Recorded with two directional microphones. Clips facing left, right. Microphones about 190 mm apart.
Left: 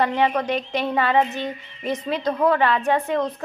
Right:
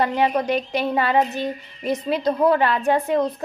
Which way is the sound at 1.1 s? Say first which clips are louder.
Right 1 dB; 40° right (ahead or behind).